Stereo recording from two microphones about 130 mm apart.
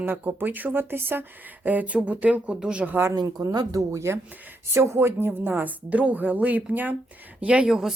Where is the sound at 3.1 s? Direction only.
30° right (ahead or behind).